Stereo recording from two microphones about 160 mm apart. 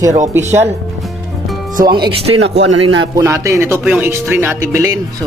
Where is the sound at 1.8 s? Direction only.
25° right (ahead or behind).